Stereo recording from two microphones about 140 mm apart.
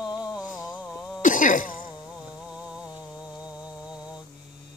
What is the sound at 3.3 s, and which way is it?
Mantra, 10° right (ahead or behind).